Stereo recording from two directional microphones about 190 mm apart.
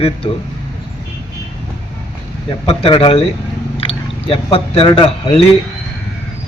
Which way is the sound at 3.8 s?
30° left (ahead or behind).